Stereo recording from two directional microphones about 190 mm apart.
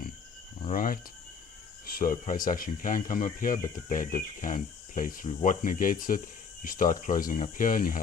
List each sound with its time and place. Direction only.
0.7 s speech: 45° left (ahead or behind)